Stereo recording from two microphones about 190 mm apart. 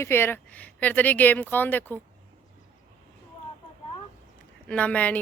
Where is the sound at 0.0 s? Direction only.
10° left (ahead or behind).